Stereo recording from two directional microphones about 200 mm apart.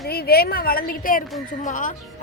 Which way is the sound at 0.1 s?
50° left (ahead or behind).